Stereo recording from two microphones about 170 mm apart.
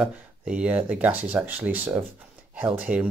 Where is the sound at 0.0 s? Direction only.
5° right (ahead or behind).